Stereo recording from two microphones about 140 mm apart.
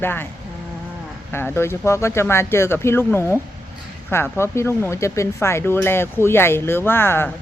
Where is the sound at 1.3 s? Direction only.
15° left (ahead or behind).